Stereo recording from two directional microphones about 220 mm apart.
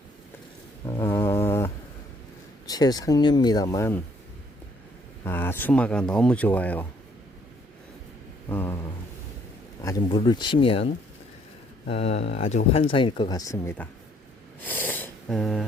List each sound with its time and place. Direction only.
0.9 s a sound: 15° left (ahead or behind)
2.6 s speech: 15° left (ahead or behind)
5.2 s speech: 10° left (ahead or behind)
8.4 s speech: 10° left (ahead or behind)
11.9 s speech: 30° left (ahead or behind); by 13.8 s 10° left (ahead or behind)
14.6 s snort: 10° left (ahead or behind)